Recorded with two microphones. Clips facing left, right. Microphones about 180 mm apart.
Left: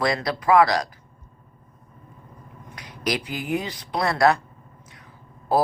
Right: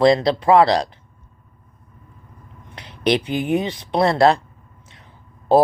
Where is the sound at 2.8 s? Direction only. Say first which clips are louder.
Right 8 dB; 30° right (ahead or behind).